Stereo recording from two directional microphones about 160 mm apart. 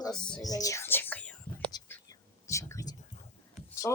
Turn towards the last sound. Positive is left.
turn(degrees=15)  # may be behind; listen again after turning